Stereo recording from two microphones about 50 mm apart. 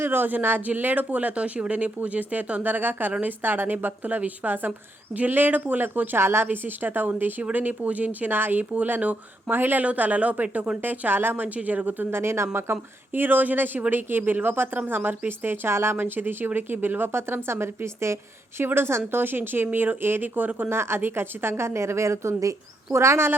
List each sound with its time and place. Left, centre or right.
0.0 s speech: right
6.1 s a woman's voice: right
6.5 s speech: right
8.3 s speech: right
9.5 s speech: right
9.8 s speech: right
10.8 s speech: right
11.4 s speech: right
12.1 s a woman's voice: right
13.1 s speech: right
16.0 s a woman's voice: right
19.2 s speech: right
20.7 s a woman's voice: right